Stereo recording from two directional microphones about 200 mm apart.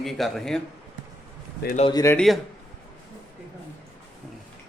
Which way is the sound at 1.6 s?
35° left (ahead or behind).